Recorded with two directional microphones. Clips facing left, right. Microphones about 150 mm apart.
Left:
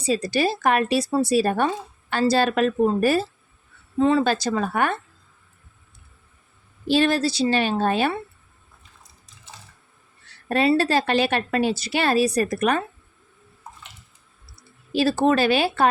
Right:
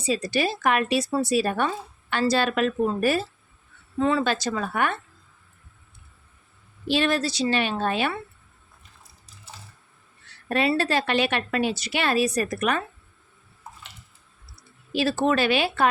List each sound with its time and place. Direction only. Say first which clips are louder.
0.0 s speech: left 3 dB; 35° left (ahead or behind)
6.8 s speech: left 4 dB; 40° left (ahead or behind)
10.5 s speech: left 4 dB; 35° left (ahead or behind)
14.9 s speech: left 3 dB; 35° left (ahead or behind)